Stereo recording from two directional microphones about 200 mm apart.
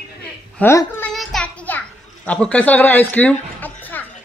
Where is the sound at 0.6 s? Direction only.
10° left (ahead or behind).